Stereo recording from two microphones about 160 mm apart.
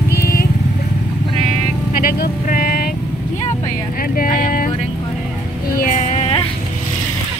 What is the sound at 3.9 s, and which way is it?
Speech, 60° left (ahead or behind).